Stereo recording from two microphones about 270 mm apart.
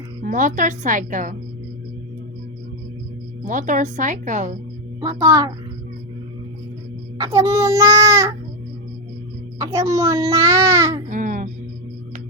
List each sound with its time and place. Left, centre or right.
0.2 s a woman's voice: right
3.4 s a woman's voice: right
4.9 s speech: centre
7.2 s speech: centre
9.6 s speech: centre
11.1 s music: right